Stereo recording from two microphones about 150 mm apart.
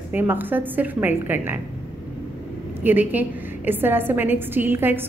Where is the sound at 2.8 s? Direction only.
10° right (ahead or behind).